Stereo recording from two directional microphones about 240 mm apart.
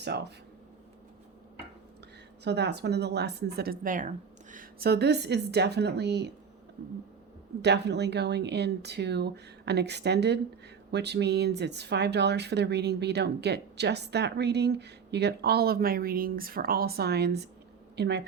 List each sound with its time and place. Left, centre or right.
0.0 s speech: right
2.4 s speech: right
7.6 s speech: right